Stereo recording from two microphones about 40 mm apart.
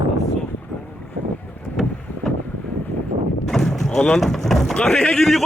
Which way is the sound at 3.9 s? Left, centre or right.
Left.